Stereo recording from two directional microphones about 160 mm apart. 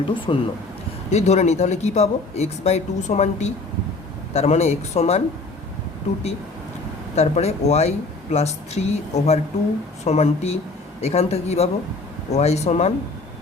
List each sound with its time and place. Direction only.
0.3 s speech: 35° left (ahead or behind)
7.2 s speech: 40° left (ahead or behind)